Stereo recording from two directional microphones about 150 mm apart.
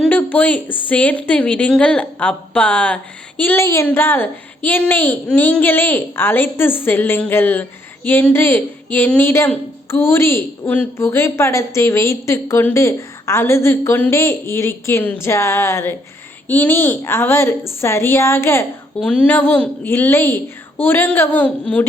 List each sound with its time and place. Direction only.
0.0 s a sound: 10° left (ahead or behind)
0.9 s a woman's voice: 10° left (ahead or behind)
18.9 s a woman's voice: 5° left (ahead or behind)